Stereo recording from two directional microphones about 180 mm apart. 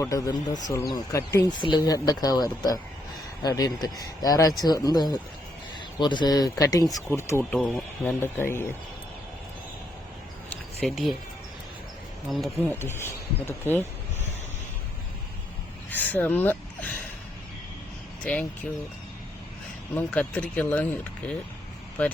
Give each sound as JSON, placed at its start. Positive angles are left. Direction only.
{"t": 0.0, "sound": "speech", "side_deg": 20}
{"t": 10.5, "sound": "a sound", "side_deg": 0}
{"t": 12.5, "sound": "speech", "side_deg": 10}
{"t": 15.9, "sound": "speech", "side_deg": 10}
{"t": 18.2, "sound": "speech", "side_deg": 5}
{"t": 19.9, "sound": "speech", "side_deg": 5}